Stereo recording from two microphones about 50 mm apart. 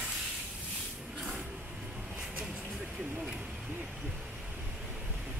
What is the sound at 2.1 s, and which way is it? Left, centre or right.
Vehicle, centre.